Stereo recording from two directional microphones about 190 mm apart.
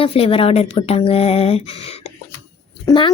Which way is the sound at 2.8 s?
25° left (ahead or behind).